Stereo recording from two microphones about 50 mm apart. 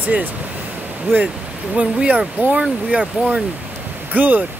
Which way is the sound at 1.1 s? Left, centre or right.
Right.